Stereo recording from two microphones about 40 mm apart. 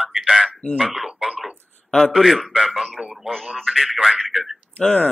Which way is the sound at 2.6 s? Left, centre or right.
Centre.